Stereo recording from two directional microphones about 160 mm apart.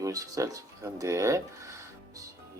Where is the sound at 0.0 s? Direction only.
20° right (ahead or behind).